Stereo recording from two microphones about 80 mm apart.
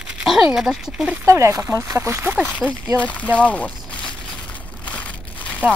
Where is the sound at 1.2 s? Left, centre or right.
Right.